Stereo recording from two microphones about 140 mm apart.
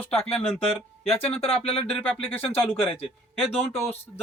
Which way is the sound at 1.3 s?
45° left (ahead or behind).